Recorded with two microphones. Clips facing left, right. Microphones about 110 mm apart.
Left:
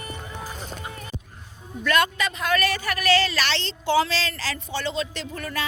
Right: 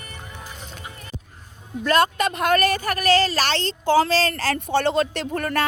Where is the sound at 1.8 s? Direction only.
40° right (ahead or behind); by 5.7 s 55° right (ahead or behind).